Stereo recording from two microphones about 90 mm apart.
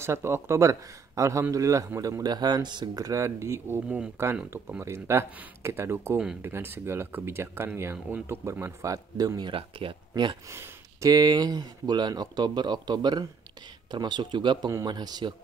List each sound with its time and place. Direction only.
0.0 s speech: 30° right (ahead or behind); by 3.1 s 55° right (ahead or behind)
3.1 s speech: 35° right (ahead or behind)
9.5 s speech: 75° right (ahead or behind)
10.5 s a sound: 30° right (ahead or behind)
11.1 s speech: 45° right (ahead or behind)